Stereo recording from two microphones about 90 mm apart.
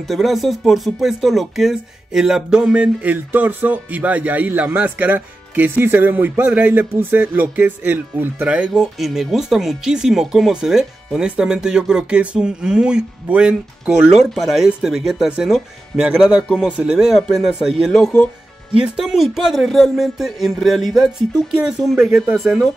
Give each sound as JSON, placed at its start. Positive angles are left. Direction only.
{"t": 0.1, "sound": "speech", "side_deg": 0}
{"t": 9.0, "sound": "speech", "side_deg": 0}